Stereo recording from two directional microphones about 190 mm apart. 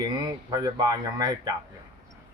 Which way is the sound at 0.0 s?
20° right (ahead or behind).